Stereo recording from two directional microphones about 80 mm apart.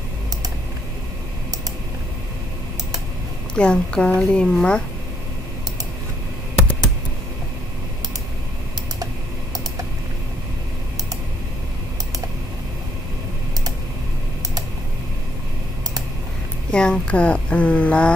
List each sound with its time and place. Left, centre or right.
3.5 s speech: centre
16.7 s speech: centre